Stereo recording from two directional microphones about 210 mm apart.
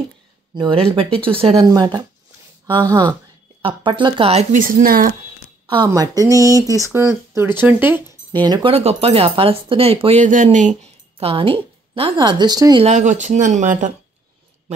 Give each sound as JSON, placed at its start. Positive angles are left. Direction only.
{"t": 0.6, "sound": "speech", "side_deg": -25}
{"t": 5.7, "sound": "speech", "side_deg": -20}
{"t": 8.5, "sound": "speech", "side_deg": -25}
{"t": 12.8, "sound": "speech", "side_deg": -35}